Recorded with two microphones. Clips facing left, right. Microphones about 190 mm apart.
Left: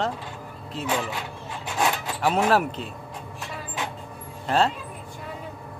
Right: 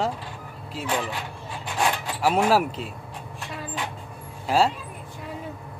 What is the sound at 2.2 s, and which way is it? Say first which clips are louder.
Speech: right 1 dB; 5° right (ahead or behind).